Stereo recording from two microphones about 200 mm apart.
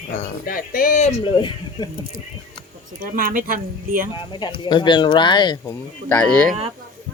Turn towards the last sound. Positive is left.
turn(degrees=5)  # may be behind; listen again after turning